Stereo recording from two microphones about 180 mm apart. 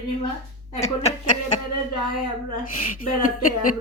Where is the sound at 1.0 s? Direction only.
35° left (ahead or behind).